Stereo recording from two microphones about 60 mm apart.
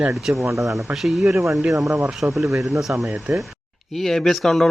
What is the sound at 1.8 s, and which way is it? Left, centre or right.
Speech, right.